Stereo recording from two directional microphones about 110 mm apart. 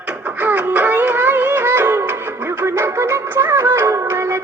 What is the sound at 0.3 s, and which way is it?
Music, 15° right (ahead or behind).